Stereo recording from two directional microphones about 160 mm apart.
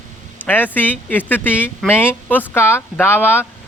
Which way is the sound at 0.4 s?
10° left (ahead or behind).